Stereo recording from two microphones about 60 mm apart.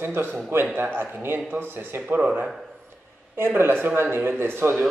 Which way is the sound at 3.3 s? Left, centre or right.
Right.